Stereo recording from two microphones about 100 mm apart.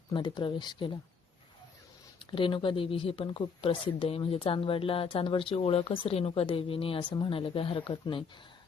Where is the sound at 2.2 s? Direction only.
60° left (ahead or behind).